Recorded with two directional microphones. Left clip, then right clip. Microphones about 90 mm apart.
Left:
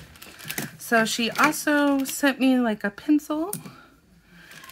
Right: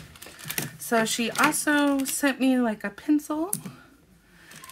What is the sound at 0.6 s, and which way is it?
Typing, 35° left (ahead or behind).